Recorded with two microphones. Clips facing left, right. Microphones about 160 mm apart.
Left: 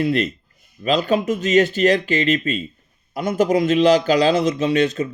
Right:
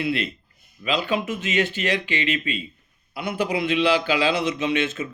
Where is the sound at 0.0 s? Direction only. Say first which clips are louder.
Left 6 dB; 40° left (ahead or behind).